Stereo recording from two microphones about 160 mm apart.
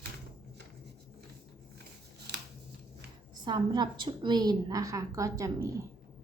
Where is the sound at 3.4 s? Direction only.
30° right (ahead or behind).